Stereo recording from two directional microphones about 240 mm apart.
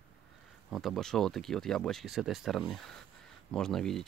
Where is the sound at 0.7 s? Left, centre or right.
Centre.